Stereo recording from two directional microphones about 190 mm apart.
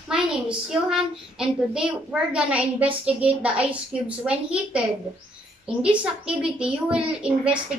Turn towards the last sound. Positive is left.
turn(degrees=-5)  # may be behind; listen again after turning